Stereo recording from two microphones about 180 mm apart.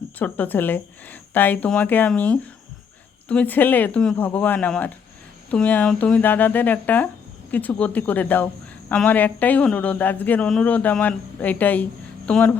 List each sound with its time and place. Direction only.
0.2 s speech: 10° left (ahead or behind)